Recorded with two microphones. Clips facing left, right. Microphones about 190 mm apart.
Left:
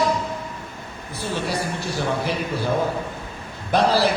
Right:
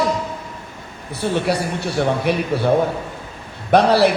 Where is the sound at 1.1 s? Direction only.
65° right (ahead or behind).